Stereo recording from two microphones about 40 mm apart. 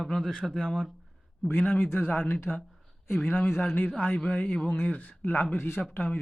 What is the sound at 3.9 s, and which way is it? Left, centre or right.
Speech, left.